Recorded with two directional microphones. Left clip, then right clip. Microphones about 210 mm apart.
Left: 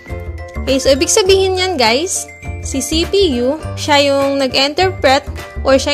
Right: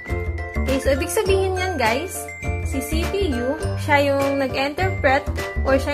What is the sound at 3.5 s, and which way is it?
Speech, 45° left (ahead or behind).